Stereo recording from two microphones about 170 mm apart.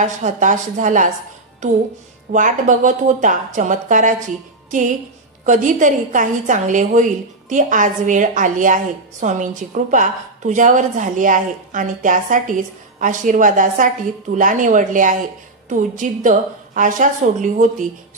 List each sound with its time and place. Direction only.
0.0 s a woman's voice: 45° right (ahead or behind)
5.4 s a woman's voice: 50° right (ahead or behind)